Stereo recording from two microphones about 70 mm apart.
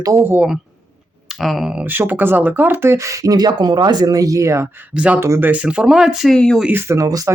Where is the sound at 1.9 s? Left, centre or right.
Right.